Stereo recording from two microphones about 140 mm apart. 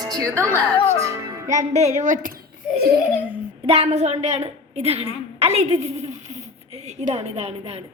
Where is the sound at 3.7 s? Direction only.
45° right (ahead or behind).